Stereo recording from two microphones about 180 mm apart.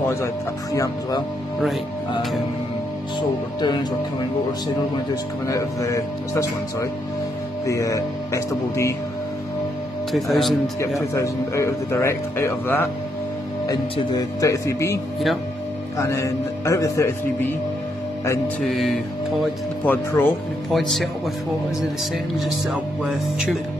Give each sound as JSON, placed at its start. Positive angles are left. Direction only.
{"t": 3.2, "sound": "speech", "side_deg": 25}
{"t": 5.5, "sound": "speech", "side_deg": 15}
{"t": 10.1, "sound": "music", "side_deg": 0}
{"t": 11.1, "sound": "speech", "side_deg": 15}
{"t": 16.0, "sound": "speech", "side_deg": 15}
{"t": 18.6, "sound": "music", "side_deg": 0}
{"t": 19.4, "sound": "speech", "side_deg": 10}
{"t": 20.7, "sound": "music", "side_deg": 0}
{"t": 22.4, "sound": "music", "side_deg": 0}